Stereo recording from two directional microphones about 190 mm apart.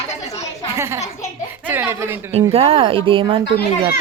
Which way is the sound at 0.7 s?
15° right (ahead or behind).